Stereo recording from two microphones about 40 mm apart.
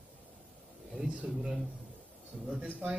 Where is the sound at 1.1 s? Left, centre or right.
Right.